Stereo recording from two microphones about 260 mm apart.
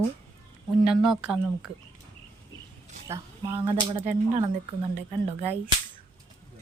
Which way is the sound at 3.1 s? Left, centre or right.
Centre.